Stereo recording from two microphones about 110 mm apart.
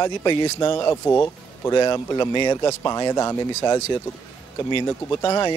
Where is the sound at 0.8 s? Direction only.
30° left (ahead or behind).